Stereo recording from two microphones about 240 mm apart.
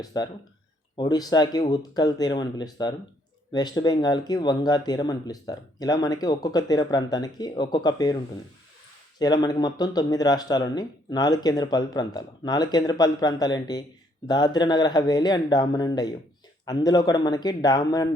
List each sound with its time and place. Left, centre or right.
0.0 s speech: centre
9.1 s speech: centre